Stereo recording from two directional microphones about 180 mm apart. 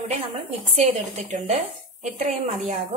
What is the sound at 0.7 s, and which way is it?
A woman's voice, 40° right (ahead or behind).